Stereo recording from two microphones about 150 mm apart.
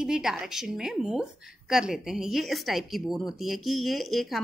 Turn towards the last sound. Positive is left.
turn(degrees=0)  # may be behind; listen again after turning